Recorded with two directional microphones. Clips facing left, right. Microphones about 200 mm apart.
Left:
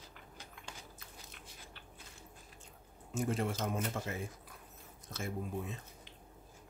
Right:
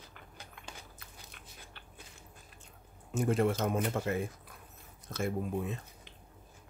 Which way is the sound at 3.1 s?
60° right (ahead or behind).